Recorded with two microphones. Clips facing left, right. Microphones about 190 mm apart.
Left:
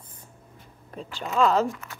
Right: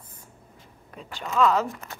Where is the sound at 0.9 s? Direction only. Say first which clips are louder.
Left 2 dB; 35° left (ahead or behind).